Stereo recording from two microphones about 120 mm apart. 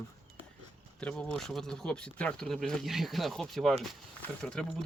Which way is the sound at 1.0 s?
10° left (ahead or behind).